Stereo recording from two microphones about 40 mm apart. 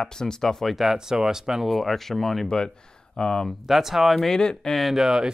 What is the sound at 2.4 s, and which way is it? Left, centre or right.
Speech, centre.